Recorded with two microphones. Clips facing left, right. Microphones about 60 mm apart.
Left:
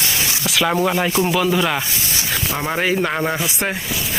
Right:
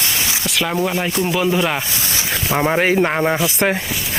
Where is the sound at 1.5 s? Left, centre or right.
Centre.